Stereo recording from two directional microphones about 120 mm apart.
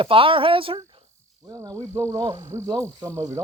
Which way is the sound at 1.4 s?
30° right (ahead or behind).